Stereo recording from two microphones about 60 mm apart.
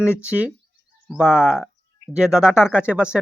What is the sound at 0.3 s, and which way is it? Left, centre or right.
Speech, right.